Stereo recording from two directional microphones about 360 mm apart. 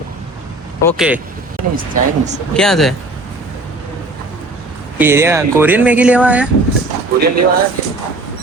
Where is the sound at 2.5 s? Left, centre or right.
Centre.